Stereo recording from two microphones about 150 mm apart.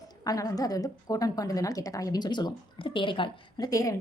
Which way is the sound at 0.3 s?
25° left (ahead or behind).